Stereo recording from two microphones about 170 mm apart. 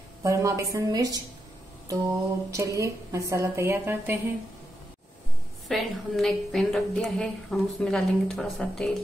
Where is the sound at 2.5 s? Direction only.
20° right (ahead or behind).